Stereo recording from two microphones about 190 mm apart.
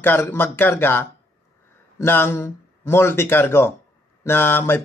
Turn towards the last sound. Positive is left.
turn(degrees=10)  # may be behind; listen again after turning